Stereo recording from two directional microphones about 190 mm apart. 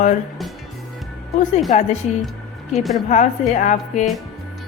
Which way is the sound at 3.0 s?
40° left (ahead or behind).